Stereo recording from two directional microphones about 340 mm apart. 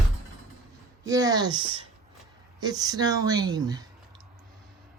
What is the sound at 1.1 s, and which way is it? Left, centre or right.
A woman's voice, centre.